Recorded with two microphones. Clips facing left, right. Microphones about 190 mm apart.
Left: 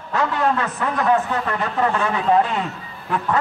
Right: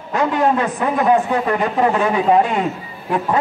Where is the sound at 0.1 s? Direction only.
15° right (ahead or behind).